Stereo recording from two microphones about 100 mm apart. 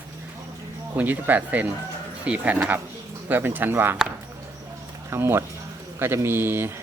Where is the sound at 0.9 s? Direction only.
15° right (ahead or behind).